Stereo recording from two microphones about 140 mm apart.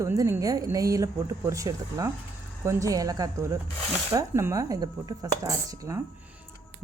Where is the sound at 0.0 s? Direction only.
20° right (ahead or behind).